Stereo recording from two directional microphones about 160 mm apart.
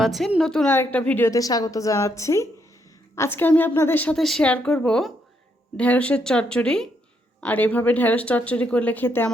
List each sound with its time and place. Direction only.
0.0 s a woman's voice: centre (ahead or behind)